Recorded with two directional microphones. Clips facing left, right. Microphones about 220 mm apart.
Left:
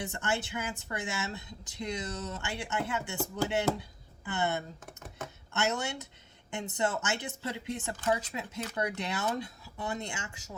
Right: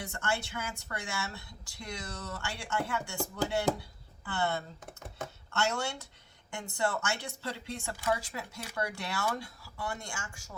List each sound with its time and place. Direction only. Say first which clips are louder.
0.0 s a woman's voice: left 2 dB; 20° left (ahead or behind)
4.3 s a woman's voice: left 1 dB; 20° left (ahead or behind)